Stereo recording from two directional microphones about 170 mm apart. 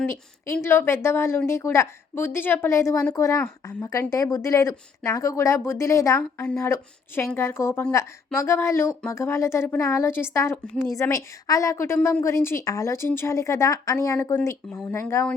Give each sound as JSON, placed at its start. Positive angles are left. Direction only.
{"t": 0.0, "sound": "speech", "side_deg": 15}